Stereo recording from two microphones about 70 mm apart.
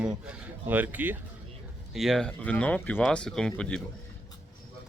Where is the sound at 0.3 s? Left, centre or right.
Right.